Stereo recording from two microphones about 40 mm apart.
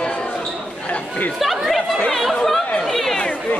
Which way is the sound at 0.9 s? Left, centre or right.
Left.